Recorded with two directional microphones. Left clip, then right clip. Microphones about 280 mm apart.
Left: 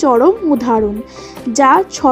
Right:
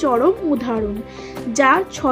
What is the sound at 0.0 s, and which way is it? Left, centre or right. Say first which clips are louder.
A woman's voice: left 6 dB; centre.